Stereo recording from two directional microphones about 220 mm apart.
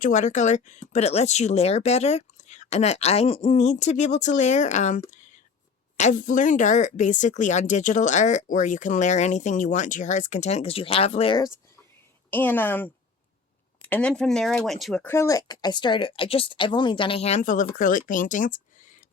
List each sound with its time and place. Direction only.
0.0 s speech: 35° left (ahead or behind)
12.3 s speech: 10° left (ahead or behind); by 19.0 s 35° left (ahead or behind)